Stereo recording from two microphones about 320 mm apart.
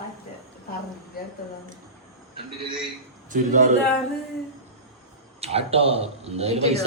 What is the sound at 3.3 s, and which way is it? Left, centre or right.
Speech, right.